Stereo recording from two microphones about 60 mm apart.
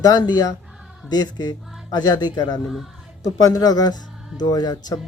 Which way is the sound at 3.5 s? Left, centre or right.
Left.